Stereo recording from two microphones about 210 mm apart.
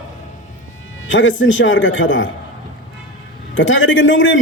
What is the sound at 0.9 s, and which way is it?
A man's voice, 65° left (ahead or behind).